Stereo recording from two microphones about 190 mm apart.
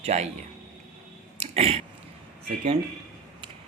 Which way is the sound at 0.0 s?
35° right (ahead or behind).